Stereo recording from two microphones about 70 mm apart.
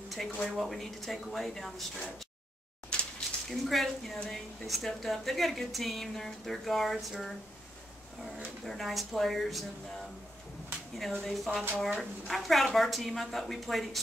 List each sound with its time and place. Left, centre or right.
0.1 s a woman's voice: centre
2.9 s a sound: centre
3.4 s a woman's voice: centre
8.6 s a woman's voice: centre
11.0 s a woman's voice: centre